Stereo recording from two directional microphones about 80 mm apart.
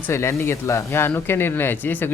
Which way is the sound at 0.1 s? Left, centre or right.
Left.